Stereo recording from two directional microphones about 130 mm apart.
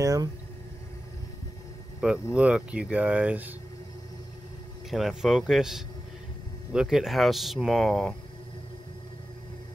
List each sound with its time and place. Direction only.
0.0 s vehicle: 30° right (ahead or behind)
2.0 s speech: 10° right (ahead or behind)
4.8 s speech: centre (ahead or behind)